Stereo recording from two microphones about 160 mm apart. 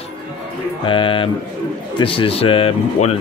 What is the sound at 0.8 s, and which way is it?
Speech, 30° left (ahead or behind).